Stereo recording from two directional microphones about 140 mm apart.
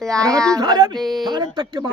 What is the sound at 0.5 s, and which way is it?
Speech, 30° right (ahead or behind).